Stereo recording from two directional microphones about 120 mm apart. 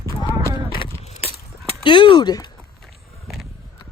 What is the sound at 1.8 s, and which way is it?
Speech, 45° left (ahead or behind).